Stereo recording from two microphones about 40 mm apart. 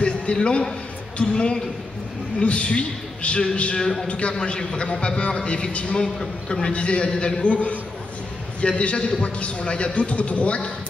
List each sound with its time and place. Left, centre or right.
0.0 s a sound: left
1.1 s a man's voice: left
3.8 s a man's voice: centre
4.1 s a man's voice: left
6.0 s a man's voice: centre
6.6 s a man's voice: left